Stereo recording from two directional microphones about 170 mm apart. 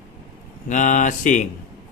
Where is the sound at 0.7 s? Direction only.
50° left (ahead or behind).